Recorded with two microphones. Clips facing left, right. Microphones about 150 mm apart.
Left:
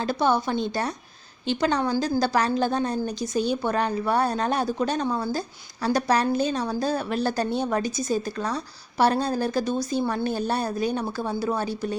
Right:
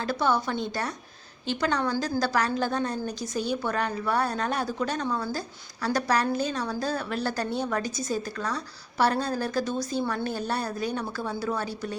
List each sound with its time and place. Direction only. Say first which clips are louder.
0.0 s a woman's voice: left 3 dB; 20° left (ahead or behind)